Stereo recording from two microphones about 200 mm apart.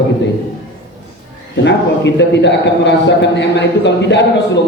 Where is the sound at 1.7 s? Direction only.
60° left (ahead or behind).